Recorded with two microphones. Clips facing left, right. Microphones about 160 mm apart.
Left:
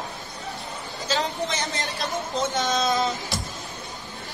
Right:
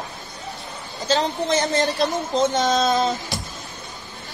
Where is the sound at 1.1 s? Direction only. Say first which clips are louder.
Right 6 dB; 40° right (ahead or behind).